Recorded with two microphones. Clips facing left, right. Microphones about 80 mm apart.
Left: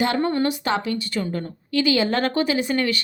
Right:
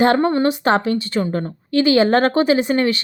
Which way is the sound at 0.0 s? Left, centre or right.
Right.